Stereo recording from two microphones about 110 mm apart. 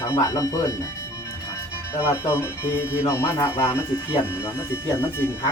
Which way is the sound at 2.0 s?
20° left (ahead or behind).